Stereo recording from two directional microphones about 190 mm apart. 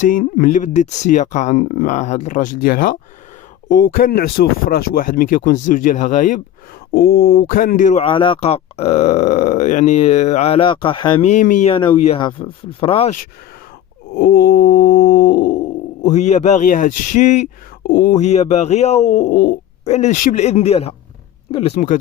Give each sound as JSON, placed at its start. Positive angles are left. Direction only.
{"t": 0.0, "sound": "speech", "side_deg": 45}
{"t": 6.9, "sound": "speech", "side_deg": 50}
{"t": 11.3, "sound": "speech", "side_deg": 40}
{"t": 11.7, "sound": "speech", "side_deg": 25}
{"t": 14.1, "sound": "speech", "side_deg": 50}
{"t": 19.8, "sound": "speech", "side_deg": 35}